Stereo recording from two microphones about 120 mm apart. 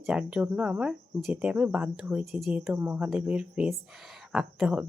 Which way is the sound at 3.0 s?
10° right (ahead or behind).